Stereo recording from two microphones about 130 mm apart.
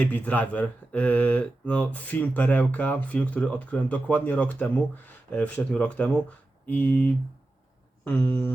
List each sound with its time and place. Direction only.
0.0 s speech: 10° left (ahead or behind)